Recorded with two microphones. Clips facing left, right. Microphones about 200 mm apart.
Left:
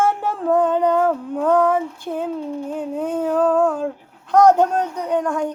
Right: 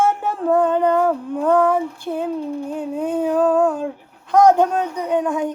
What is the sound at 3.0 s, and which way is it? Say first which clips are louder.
Speech: right 2 dB; 15° right (ahead or behind).